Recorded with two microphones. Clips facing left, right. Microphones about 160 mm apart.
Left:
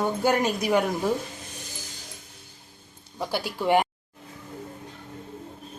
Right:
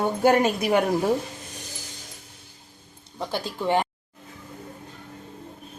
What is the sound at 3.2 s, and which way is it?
Speech, 10° left (ahead or behind).